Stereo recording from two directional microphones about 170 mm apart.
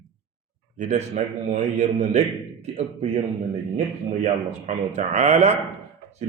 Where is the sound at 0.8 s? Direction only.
45° right (ahead or behind).